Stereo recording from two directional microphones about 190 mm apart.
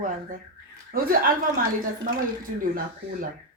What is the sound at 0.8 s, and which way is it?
Speech, 50° right (ahead or behind).